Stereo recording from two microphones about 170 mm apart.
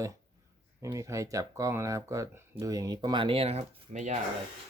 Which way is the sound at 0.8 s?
20° right (ahead or behind).